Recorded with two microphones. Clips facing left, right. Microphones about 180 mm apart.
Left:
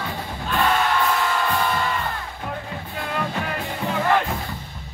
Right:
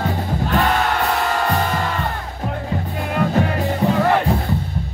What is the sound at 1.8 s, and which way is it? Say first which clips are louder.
Music: right 2 dB; 70° right (ahead or behind).